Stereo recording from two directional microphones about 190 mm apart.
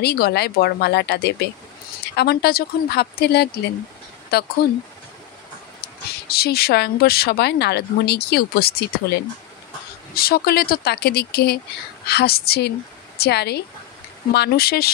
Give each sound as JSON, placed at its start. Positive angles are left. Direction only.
{"t": 0.0, "sound": "speech", "side_deg": 55}
{"t": 5.8, "sound": "speech", "side_deg": 55}
{"t": 10.1, "sound": "speech", "side_deg": 55}